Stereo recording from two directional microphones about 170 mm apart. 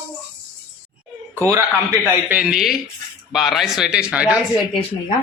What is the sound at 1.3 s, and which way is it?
Speech, 20° right (ahead or behind).